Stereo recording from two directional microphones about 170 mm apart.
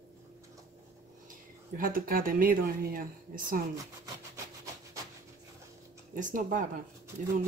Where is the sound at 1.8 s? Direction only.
55° right (ahead or behind).